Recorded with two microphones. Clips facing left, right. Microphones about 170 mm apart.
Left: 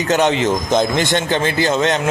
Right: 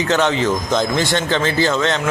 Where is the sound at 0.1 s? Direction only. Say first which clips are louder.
Left 3 dB; 20° left (ahead or behind).